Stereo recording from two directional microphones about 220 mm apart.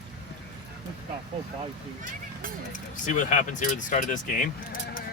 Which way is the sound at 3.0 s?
35° left (ahead or behind).